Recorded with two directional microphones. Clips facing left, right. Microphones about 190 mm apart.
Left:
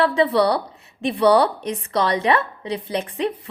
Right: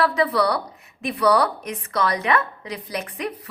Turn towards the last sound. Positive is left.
turn(degrees=30)  # may be behind; listen again after turning